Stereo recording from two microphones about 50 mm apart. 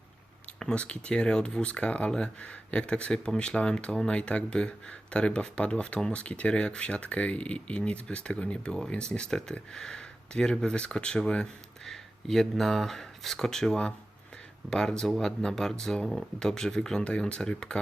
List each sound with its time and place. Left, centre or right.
0.6 s speech: left
11.9 s speech: centre